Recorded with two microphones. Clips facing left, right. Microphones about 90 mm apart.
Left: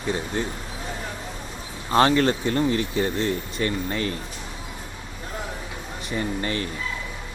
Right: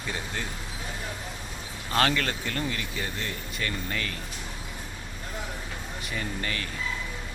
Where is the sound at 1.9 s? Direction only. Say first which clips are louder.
Left 7 dB; 25° left (ahead or behind).